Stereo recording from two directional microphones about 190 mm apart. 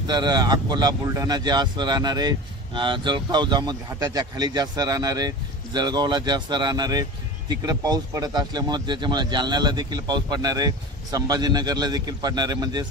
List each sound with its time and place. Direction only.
0.0 s speech: 20° right (ahead or behind)